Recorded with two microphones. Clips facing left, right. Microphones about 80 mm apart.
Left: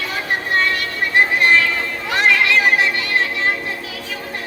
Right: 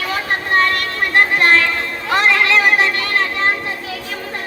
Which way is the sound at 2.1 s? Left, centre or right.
Right.